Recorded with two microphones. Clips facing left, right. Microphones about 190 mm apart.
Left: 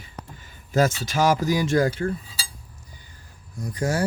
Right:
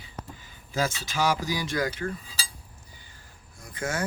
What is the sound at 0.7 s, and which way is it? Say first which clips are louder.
Speech: left 7 dB; 45° left (ahead or behind).